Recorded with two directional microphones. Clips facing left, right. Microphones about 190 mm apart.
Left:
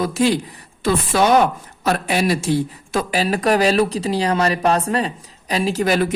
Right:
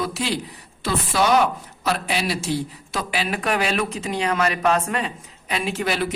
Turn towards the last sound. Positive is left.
turn(degrees=45)  # may be behind; listen again after turning